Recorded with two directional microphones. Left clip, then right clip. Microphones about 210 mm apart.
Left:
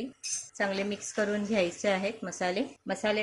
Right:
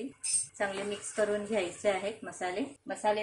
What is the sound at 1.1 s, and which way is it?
A woman's voice, 50° left (ahead or behind).